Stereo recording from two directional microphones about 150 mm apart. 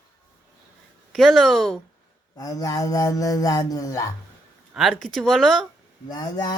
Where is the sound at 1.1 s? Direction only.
Centre (ahead or behind).